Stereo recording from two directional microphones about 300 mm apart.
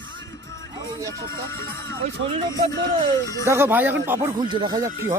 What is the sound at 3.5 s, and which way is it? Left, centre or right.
Speech, centre.